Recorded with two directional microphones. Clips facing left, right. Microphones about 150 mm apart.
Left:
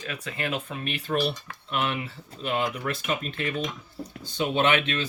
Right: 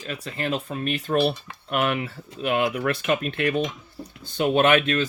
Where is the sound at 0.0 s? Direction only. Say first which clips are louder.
Right 3 dB; 35° right (ahead or behind).